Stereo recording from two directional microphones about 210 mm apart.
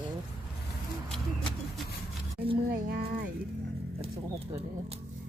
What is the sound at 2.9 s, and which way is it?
Music, 45° right (ahead or behind).